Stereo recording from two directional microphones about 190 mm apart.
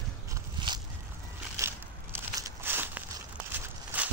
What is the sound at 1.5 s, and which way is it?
Crushing, 15° right (ahead or behind).